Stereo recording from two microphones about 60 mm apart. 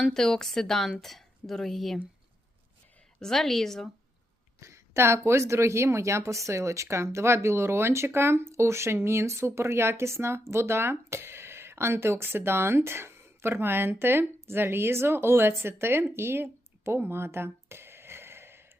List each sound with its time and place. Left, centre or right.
0.0 s a woman's voice: centre
3.2 s speech: centre
4.6 s a woman's voice: right